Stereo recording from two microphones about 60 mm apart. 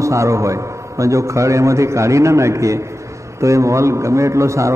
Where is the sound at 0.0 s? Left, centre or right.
Right.